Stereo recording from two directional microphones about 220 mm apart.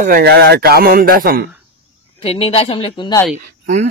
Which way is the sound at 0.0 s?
50° right (ahead or behind).